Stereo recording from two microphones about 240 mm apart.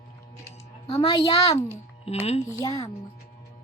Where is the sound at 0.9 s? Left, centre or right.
Left.